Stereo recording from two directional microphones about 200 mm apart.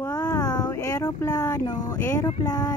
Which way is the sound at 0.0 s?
15° left (ahead or behind).